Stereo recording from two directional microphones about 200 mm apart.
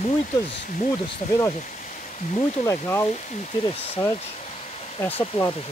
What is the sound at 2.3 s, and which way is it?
Speech, 15° left (ahead or behind).